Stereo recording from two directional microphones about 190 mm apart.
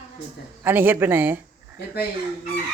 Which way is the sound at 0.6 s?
10° right (ahead or behind).